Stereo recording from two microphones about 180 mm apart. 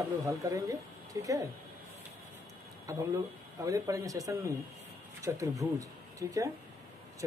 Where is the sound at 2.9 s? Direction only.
20° right (ahead or behind).